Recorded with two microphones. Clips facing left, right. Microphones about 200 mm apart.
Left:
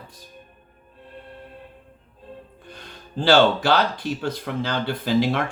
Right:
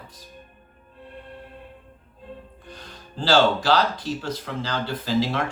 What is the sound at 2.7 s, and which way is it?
Speech, 55° left (ahead or behind).